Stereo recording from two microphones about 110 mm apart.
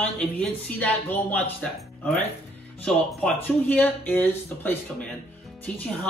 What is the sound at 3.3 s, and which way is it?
Speech, 15° left (ahead or behind).